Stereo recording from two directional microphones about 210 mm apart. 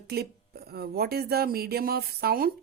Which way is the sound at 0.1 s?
50° right (ahead or behind).